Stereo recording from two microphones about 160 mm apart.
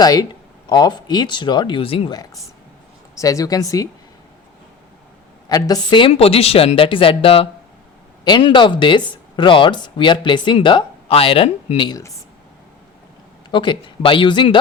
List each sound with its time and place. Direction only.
0.0 s speech: 25° left (ahead or behind)
5.5 s speech: 25° left (ahead or behind)
11.9 s speech: 20° left (ahead or behind)
13.5 s speech: 30° left (ahead or behind)